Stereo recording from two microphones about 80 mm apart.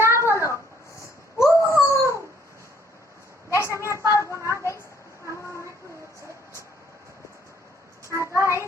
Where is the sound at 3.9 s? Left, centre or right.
Right.